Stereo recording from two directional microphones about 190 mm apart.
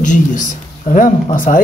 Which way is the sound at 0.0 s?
40° left (ahead or behind).